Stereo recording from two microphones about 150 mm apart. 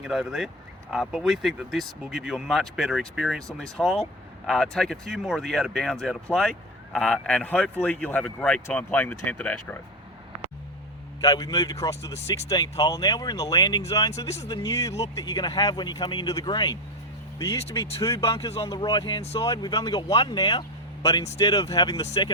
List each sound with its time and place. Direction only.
0.0 s speech: 5° right (ahead or behind)
11.2 s speech: 25° left (ahead or behind)